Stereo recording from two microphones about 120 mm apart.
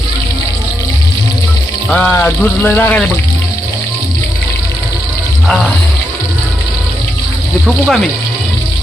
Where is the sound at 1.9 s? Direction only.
15° left (ahead or behind).